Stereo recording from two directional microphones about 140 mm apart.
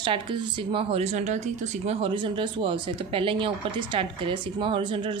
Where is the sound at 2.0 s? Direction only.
40° right (ahead or behind).